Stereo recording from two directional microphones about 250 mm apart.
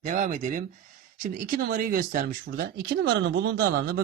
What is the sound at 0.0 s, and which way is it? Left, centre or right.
Speech, right.